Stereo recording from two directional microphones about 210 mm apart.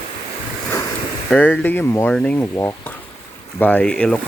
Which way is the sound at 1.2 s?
10° left (ahead or behind).